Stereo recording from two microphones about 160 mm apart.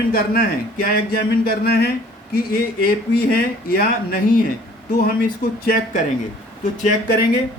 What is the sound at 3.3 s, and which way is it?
Speech, 70° left (ahead or behind).